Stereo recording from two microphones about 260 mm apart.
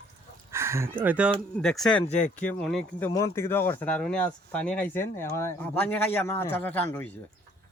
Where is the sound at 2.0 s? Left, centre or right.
Left.